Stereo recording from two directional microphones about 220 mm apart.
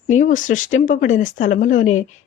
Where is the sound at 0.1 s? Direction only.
35° left (ahead or behind).